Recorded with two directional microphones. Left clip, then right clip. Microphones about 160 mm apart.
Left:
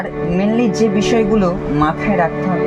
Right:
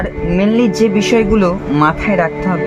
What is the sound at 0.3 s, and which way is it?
Speech, 25° right (ahead or behind).